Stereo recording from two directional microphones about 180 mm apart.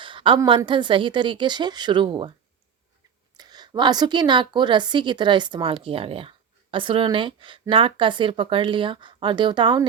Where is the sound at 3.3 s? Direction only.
25° right (ahead or behind).